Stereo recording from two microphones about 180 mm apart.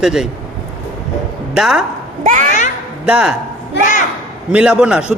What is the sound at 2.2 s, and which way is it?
Children playing, 45° right (ahead or behind).